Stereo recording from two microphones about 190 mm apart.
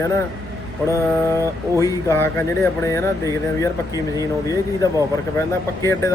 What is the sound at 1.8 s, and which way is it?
Speech, 15° left (ahead or behind).